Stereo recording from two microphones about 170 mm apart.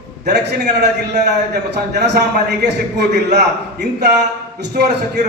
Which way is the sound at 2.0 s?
75° right (ahead or behind).